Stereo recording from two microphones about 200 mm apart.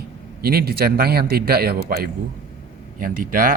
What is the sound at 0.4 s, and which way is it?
A man's voice, 50° right (ahead or behind).